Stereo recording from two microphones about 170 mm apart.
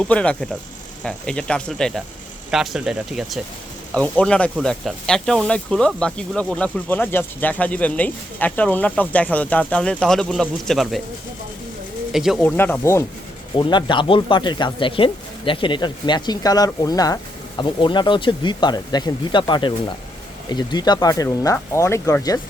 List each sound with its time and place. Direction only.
0.0 s speech: 5° left (ahead or behind)
12.1 s speech: centre (ahead or behind)
12.4 s speech: 10° left (ahead or behind)
13.6 s speech: 25° left (ahead or behind)